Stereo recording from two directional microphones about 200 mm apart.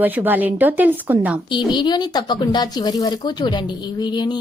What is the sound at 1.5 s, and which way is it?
Speech, 20° left (ahead or behind).